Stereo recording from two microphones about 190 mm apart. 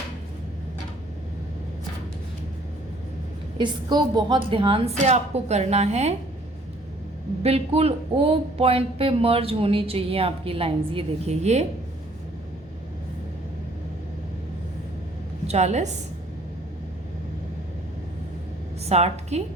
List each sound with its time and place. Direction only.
3.6 s speech: 25° right (ahead or behind)
7.4 s speech: 30° right (ahead or behind)
15.4 s speech: 35° right (ahead or behind)
18.9 s speech: 35° right (ahead or behind)